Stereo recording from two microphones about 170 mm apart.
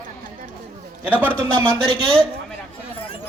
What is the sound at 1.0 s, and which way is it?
Speech, 10° right (ahead or behind).